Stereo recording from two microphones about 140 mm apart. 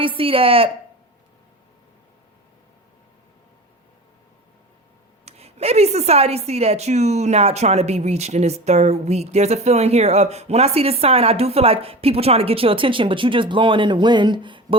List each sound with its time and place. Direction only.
0.0 s speech: 40° right (ahead or behind)
5.2 s a woman's voice: 50° right (ahead or behind)